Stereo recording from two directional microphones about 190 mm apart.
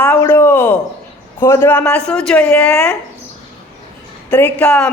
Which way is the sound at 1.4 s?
15° left (ahead or behind).